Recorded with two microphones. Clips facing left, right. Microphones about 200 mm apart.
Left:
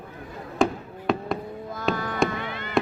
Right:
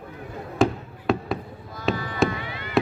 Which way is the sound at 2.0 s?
50° left (ahead or behind).